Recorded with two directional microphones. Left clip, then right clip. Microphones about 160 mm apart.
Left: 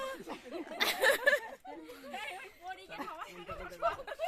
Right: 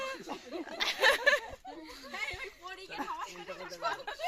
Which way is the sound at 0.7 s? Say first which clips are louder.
Right 2 dB; 20° left (ahead or behind).